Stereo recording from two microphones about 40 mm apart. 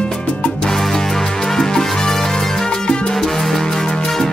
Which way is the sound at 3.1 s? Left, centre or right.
Centre.